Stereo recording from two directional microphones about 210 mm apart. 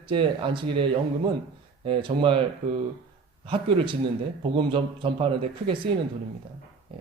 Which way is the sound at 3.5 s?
25° right (ahead or behind).